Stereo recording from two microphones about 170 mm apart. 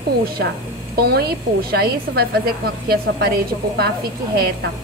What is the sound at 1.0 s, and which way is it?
A woman's voice, 70° right (ahead or behind).